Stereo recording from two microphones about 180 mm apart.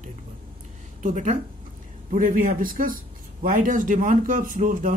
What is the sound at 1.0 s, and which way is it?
Speech, 40° right (ahead or behind).